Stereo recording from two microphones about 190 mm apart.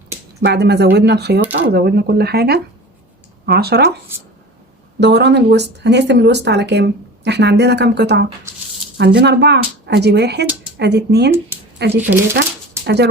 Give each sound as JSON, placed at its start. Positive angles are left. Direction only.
{"t": 0.4, "sound": "speech", "side_deg": -60}
{"t": 4.9, "sound": "speech", "side_deg": -65}
{"t": 11.5, "sound": "a sound", "side_deg": -10}
{"t": 12.1, "sound": "speech", "side_deg": -65}